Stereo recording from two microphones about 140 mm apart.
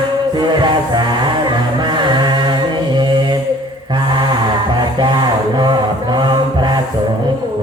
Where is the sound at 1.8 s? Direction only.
35° right (ahead or behind).